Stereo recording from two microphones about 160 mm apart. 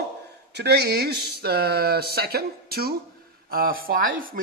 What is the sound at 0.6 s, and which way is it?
Speech, 90° right.